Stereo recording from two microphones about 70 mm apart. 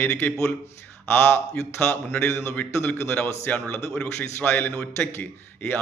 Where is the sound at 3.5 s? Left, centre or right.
Left.